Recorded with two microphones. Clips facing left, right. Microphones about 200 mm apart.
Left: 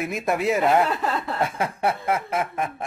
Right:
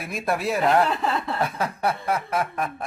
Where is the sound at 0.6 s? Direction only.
Centre (ahead or behind).